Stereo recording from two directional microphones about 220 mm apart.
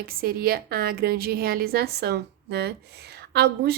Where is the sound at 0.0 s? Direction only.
40° right (ahead or behind).